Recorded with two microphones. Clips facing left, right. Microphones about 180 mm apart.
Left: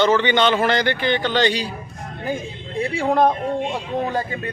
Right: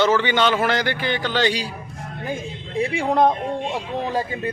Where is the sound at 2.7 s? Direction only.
Centre (ahead or behind).